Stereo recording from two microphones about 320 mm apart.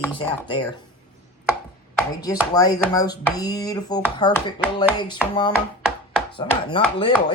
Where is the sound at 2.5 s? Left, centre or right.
Centre.